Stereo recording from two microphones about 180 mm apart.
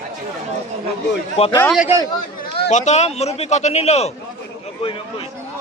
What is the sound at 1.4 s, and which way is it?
Speech, 25° left (ahead or behind).